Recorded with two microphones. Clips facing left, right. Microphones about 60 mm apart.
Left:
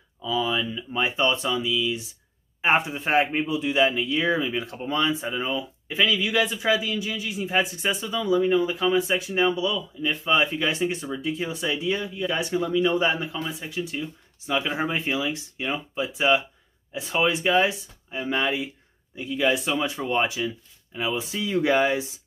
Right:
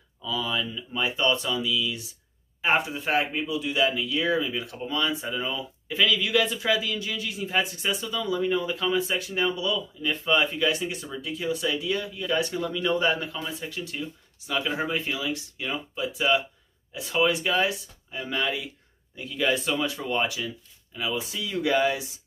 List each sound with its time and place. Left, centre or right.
0.2 s speech: left
8.4 s speech: centre
10.6 s speech: left
14.4 s speech: left